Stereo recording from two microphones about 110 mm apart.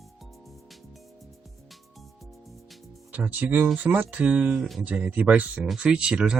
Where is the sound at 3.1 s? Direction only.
15° right (ahead or behind).